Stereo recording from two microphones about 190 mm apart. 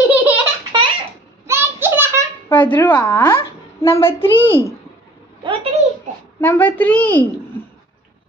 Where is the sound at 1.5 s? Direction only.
10° right (ahead or behind).